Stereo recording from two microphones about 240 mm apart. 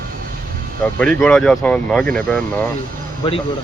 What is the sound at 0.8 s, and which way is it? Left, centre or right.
Speech, centre.